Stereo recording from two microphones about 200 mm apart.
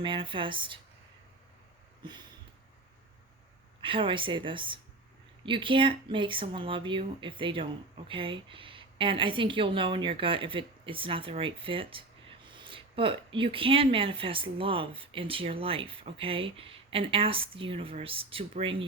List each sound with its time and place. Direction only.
0.0 s speech: 25° right (ahead or behind)
3.8 s speech: 25° right (ahead or behind)